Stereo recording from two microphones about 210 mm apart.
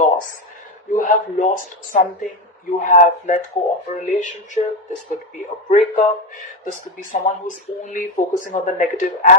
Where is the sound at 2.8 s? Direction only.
35° left (ahead or behind).